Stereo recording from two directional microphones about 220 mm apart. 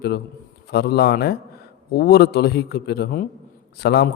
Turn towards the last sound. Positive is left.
turn(degrees=45)  # may be behind; listen again after turning